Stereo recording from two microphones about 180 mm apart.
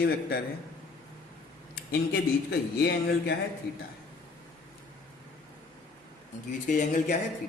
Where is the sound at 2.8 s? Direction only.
65° left (ahead or behind).